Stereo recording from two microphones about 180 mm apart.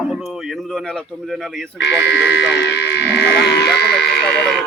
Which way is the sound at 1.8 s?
70° left (ahead or behind).